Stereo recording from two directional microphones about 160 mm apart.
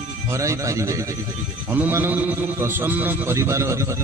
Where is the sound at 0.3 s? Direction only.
20° right (ahead or behind).